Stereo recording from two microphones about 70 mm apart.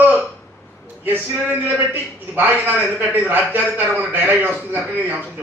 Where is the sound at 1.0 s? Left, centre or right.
Right.